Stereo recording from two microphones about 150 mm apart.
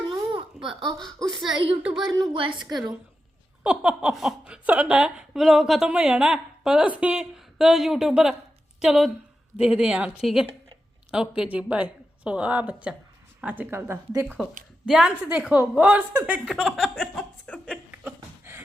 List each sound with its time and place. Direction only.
0.1 s babbling: 35° right (ahead or behind)
0.6 s speech: centre (ahead or behind)
1.5 s a woman's voice: 35° right (ahead or behind)
1.8 s speech: centre (ahead or behind)
2.3 s a woman's voice: 35° right (ahead or behind)
3.6 s a woman's voice: 5° right (ahead or behind)
14.8 s speech: 5° right (ahead or behind)
18.0 s a sound: 15° right (ahead or behind)